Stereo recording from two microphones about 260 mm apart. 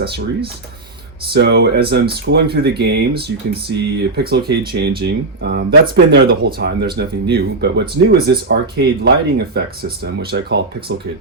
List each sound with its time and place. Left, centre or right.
1.3 s speech: right